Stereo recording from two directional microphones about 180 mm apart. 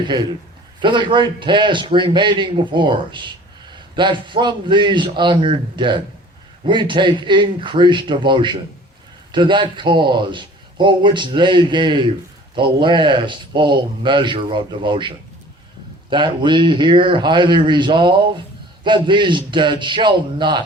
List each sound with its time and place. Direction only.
0.0 s a man's voice: 25° right (ahead or behind)